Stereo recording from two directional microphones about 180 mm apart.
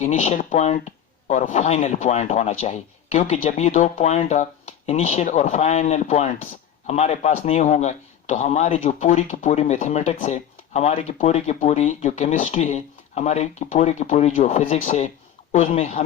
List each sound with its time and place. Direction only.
0.0 s speech: 40° left (ahead or behind)